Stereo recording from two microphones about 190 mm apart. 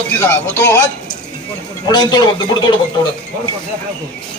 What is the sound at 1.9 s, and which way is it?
Speech, 20° left (ahead or behind).